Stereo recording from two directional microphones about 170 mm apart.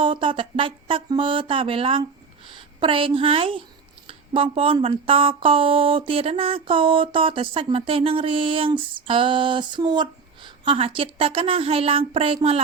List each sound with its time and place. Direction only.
0.0 s a woman's voice: 30° right (ahead or behind)